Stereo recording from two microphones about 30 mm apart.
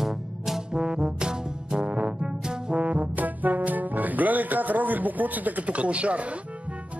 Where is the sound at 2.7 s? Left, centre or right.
Right.